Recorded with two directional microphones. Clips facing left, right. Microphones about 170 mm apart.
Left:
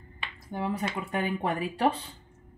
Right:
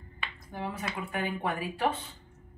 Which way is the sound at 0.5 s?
35° left (ahead or behind).